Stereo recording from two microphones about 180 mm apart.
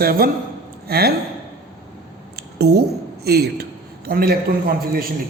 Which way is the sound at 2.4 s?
65° right (ahead or behind).